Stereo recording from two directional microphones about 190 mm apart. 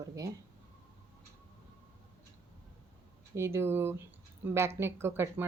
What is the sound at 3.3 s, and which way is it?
Speech, 15° right (ahead or behind).